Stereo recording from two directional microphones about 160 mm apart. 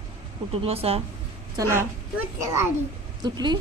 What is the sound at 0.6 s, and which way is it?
Speech, 40° right (ahead or behind).